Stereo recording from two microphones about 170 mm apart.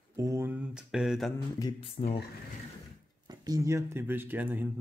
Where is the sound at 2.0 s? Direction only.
40° left (ahead or behind).